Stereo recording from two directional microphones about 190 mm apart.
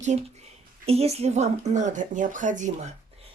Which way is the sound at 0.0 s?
40° right (ahead or behind).